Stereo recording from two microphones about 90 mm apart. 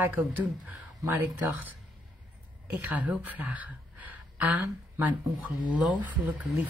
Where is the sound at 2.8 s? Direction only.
15° right (ahead or behind).